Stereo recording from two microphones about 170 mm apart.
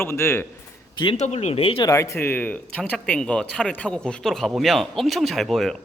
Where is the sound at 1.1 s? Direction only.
40° left (ahead or behind).